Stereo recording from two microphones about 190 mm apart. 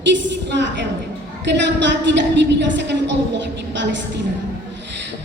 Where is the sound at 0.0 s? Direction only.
70° right (ahead or behind).